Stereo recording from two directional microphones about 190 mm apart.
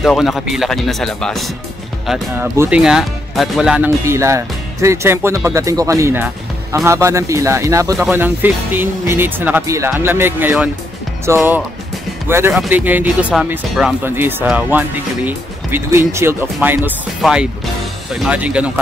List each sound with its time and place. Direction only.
0.0 s speech: centre (ahead or behind)
2.0 s speech: 10° right (ahead or behind)